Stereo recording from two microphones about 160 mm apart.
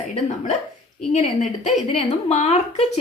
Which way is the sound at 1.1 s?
45° left (ahead or behind).